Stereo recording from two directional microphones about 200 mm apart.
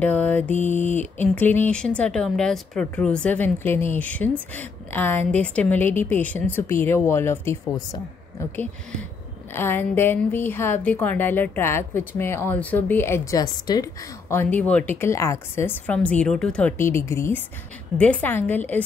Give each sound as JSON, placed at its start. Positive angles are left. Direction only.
{"t": 0.0, "sound": "a woman's voice", "side_deg": 10}
{"t": 0.6, "sound": "a sound", "side_deg": 35}
{"t": 1.3, "sound": "a woman's voice", "side_deg": 10}